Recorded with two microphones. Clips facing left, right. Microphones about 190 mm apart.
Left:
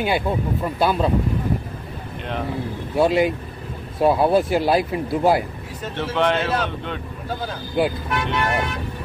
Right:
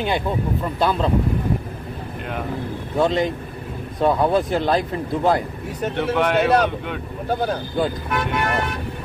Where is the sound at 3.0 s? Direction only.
10° left (ahead or behind).